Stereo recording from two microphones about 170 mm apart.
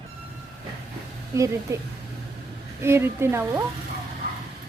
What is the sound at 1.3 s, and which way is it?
A woman's voice, 20° right (ahead or behind).